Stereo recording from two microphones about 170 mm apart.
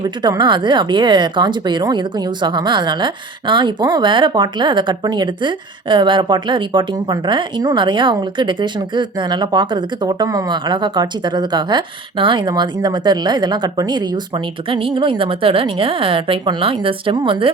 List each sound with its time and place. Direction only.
0.0 s speech: 25° right (ahead or behind)